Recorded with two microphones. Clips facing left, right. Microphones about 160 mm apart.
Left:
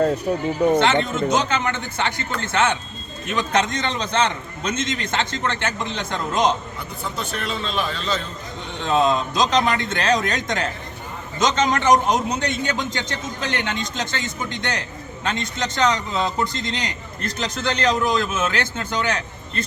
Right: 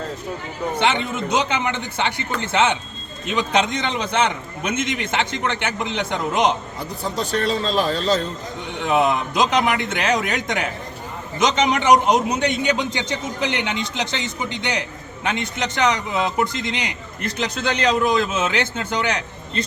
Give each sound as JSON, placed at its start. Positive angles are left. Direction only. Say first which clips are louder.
{"t": 0.8, "sound": "a man's voice", "louder": "left 2 dB", "side_deg": -15}
{"t": 7.0, "sound": "a man's voice", "louder": "right 6 dB", "side_deg": -35}
{"t": 8.8, "sound": "a man's voice", "louder": "even", "side_deg": -15}